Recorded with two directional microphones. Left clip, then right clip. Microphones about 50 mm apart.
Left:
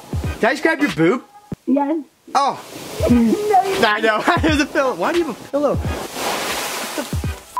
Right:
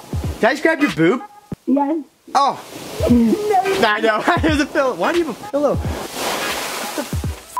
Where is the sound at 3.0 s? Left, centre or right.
Left.